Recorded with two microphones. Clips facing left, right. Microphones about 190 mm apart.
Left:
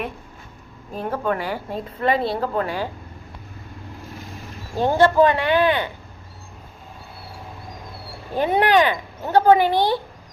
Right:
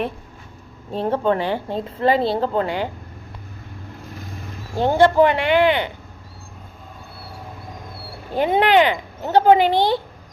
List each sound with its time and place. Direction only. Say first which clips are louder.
0.9 s speech: right 4 dB; 30° right (ahead or behind)
4.8 s speech: right 1 dB; 20° right (ahead or behind)
8.4 s speech: right 2 dB; 20° right (ahead or behind)
9.7 s speech: right 1 dB; 10° left (ahead or behind)